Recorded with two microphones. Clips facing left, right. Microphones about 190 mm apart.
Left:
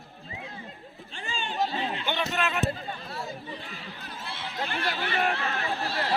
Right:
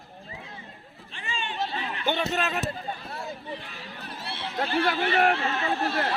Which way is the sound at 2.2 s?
40° right (ahead or behind).